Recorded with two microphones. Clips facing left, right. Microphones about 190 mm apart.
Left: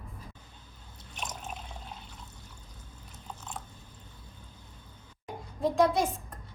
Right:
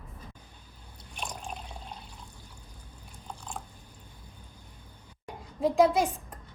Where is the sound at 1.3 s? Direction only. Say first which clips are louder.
Right 1 dB; 5° left (ahead or behind).